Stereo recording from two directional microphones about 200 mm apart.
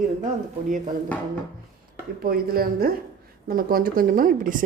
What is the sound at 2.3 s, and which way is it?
A woman's voice, 50° right (ahead or behind).